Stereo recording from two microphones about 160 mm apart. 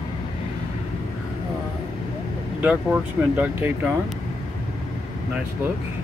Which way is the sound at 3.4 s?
10° right (ahead or behind).